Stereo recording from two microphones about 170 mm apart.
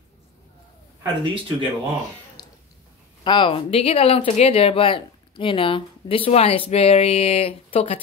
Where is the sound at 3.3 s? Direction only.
30° left (ahead or behind).